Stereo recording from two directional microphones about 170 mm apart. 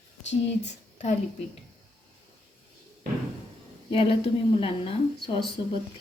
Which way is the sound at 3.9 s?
35° left (ahead or behind).